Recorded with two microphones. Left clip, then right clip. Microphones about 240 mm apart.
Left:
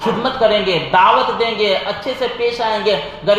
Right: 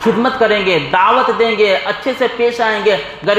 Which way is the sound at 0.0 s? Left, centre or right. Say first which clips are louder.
Right 2 dB; right.